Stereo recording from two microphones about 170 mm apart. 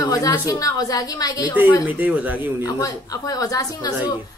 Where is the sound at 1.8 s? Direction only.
10° right (ahead or behind).